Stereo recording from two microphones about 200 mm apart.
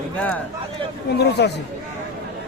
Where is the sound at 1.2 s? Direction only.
55° left (ahead or behind).